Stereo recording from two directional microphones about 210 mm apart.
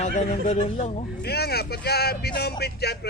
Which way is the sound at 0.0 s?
35° left (ahead or behind).